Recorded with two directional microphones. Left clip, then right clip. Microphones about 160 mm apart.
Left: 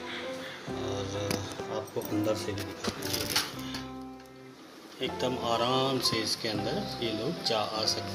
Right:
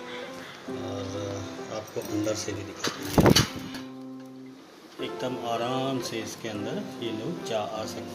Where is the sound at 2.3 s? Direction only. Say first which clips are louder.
Right 1 dB; centre (ahead or behind).